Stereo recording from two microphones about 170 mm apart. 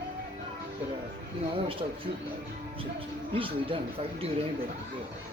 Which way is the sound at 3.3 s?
30° right (ahead or behind).